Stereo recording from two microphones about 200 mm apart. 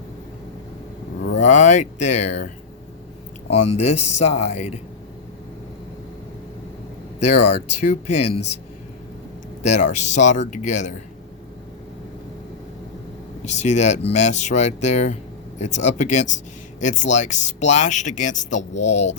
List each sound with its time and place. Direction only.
1.4 s speech: 35° left (ahead or behind)
3.5 s speech: 35° left (ahead or behind)
7.2 s speech: 35° left (ahead or behind)
9.6 s speech: 35° left (ahead or behind)
13.4 s speech: 35° left (ahead or behind)